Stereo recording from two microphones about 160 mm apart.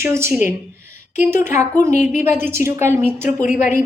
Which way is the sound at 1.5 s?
50° left (ahead or behind).